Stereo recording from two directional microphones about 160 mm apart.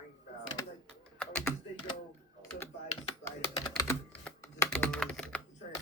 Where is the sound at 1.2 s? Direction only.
5° left (ahead or behind).